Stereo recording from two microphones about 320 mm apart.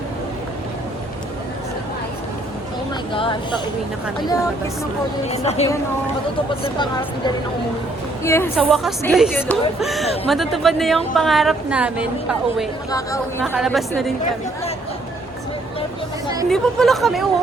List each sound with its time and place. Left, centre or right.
3.1 s speech: centre
5.3 s speech: centre
16.5 s speech: centre